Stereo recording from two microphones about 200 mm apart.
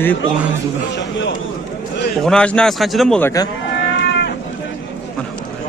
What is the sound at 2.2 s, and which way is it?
Speech, 5° left (ahead or behind).